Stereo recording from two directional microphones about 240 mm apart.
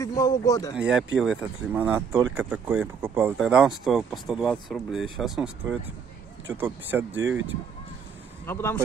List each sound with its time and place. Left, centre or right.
0.0 s a man's voice: centre
0.7 s speech: centre
7.2 s speech: right
8.5 s a man's voice: centre